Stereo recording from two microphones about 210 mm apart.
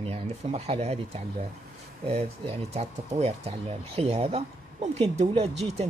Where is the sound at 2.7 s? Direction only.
30° right (ahead or behind).